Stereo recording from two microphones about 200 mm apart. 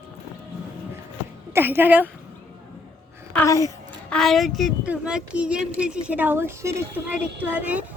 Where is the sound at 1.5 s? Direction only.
10° right (ahead or behind).